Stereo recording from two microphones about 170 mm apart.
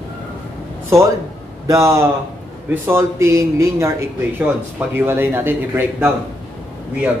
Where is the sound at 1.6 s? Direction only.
20° right (ahead or behind).